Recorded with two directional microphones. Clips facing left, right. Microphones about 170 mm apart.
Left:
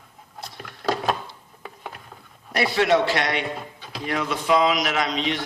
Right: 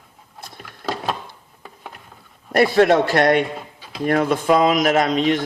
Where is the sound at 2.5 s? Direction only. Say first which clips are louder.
Right 6 dB; 50° right (ahead or behind).